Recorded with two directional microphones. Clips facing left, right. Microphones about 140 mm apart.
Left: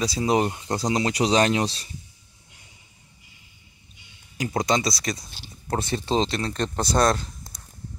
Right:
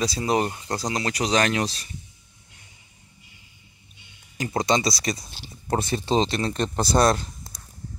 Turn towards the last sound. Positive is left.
turn(degrees=-5)  # may be behind; listen again after turning